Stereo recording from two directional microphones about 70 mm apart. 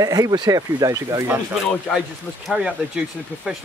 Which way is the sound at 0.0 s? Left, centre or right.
Right.